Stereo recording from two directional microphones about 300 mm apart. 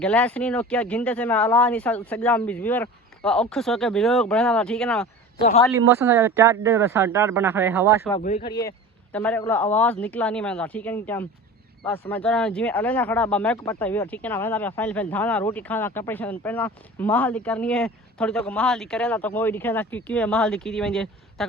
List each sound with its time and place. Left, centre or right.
0.0 s speech: centre
5.4 s speech: left
5.9 s speech: centre
8.2 s speech: left
9.1 s speech: centre